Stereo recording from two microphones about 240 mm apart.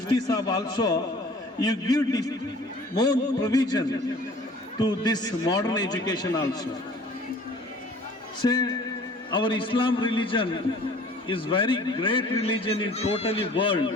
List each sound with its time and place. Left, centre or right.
0.3 s a man's voice: centre
8.4 s a man's voice: centre